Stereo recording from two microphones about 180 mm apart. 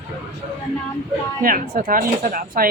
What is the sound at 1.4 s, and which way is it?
Speech, 50° right (ahead or behind).